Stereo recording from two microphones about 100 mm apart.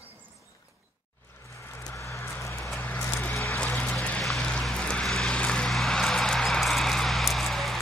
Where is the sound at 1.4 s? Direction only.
25° left (ahead or behind).